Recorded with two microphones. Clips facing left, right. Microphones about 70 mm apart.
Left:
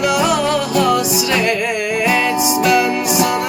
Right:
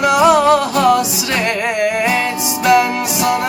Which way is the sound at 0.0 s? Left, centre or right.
Right.